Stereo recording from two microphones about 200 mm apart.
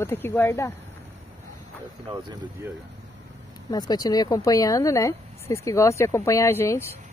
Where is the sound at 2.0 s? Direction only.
15° right (ahead or behind).